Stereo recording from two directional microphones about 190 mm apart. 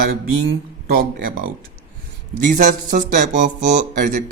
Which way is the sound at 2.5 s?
45° right (ahead or behind).